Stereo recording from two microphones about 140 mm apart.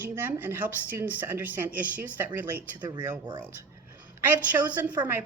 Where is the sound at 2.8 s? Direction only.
30° right (ahead or behind).